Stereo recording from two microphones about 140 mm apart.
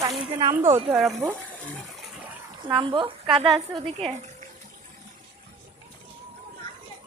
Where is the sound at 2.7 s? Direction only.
35° right (ahead or behind).